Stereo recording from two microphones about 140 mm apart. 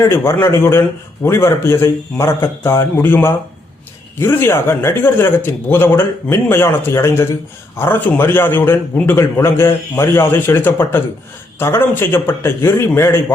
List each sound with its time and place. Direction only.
0.0 s a man's voice: 20° left (ahead or behind)